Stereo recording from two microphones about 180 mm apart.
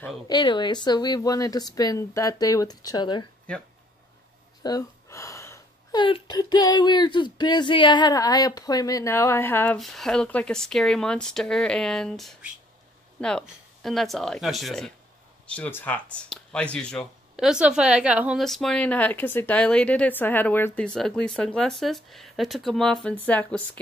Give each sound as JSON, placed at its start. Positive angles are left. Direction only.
{"t": 0.3, "sound": "speech", "side_deg": 25}
{"t": 3.5, "sound": "speech", "side_deg": 5}
{"t": 4.6, "sound": "speech", "side_deg": 20}
{"t": 9.8, "sound": "speech", "side_deg": 0}
{"t": 13.8, "sound": "speech", "side_deg": 0}